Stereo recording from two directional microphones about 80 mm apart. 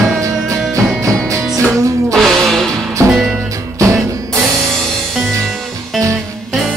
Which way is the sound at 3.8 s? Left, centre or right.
Right.